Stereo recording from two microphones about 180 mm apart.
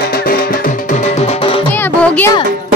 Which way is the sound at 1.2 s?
30° left (ahead or behind).